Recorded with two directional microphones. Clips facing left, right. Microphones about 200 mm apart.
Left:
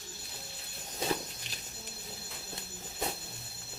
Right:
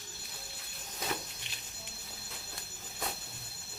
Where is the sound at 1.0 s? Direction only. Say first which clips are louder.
Left 5 dB; 30° left (ahead or behind).